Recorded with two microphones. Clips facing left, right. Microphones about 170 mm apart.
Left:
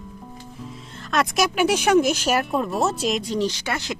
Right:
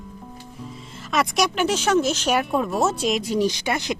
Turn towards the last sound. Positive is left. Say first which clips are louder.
# right 3 dB
turn(degrees=-15)  # may be behind; listen again after turning